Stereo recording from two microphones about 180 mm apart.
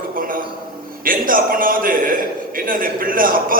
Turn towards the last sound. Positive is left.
turn(degrees=-50)  # may be behind; listen again after turning